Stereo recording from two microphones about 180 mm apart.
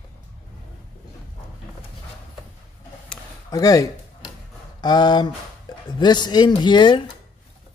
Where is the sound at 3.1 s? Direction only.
5° left (ahead or behind).